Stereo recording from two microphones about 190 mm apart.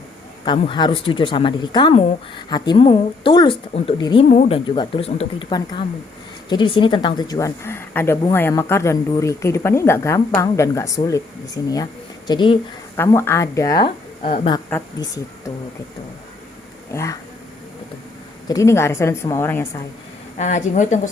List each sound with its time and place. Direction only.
0.4 s speech: 25° left (ahead or behind)
13.0 s speech: 15° left (ahead or behind)
14.2 s a woman's voice: 35° left (ahead or behind)
14.9 s speech: 20° left (ahead or behind)
16.9 s speech: 15° left (ahead or behind)
18.4 s speech: 15° left (ahead or behind)
20.4 s a woman's voice: 40° left (ahead or behind)